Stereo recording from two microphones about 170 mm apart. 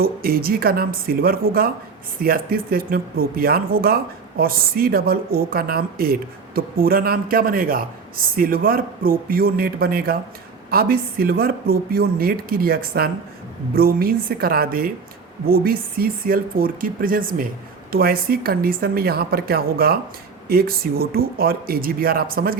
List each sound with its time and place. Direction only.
0.0 s speech: 60° right (ahead or behind)